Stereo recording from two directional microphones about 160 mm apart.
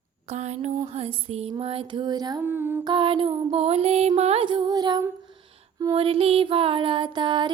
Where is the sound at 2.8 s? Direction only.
30° right (ahead or behind).